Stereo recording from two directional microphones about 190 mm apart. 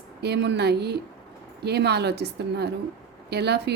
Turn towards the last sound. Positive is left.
turn(degrees=-60)  # may be behind; listen again after turning